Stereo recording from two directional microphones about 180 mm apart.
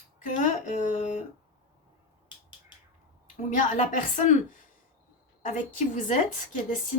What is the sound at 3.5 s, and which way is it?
Speech, 45° left (ahead or behind).